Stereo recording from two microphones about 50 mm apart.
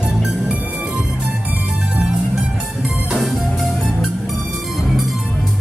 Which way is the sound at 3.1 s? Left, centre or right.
Centre.